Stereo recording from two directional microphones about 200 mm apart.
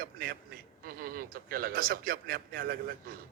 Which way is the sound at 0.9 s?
45° right (ahead or behind).